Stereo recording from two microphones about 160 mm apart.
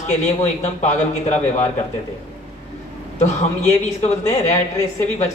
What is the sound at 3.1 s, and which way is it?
A man's voice, 45° left (ahead or behind).